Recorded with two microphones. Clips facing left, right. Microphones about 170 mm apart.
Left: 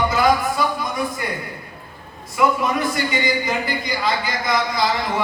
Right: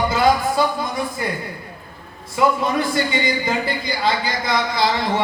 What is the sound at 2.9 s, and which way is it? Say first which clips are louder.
Speech: right 1 dB; 30° right (ahead or behind).